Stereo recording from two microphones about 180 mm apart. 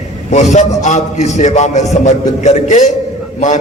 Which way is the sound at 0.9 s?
40° left (ahead or behind).